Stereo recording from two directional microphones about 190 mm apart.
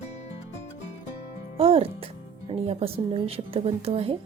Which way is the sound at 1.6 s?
30° right (ahead or behind).